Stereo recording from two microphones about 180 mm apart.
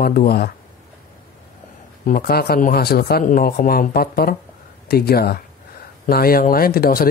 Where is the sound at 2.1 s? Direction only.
55° left (ahead or behind).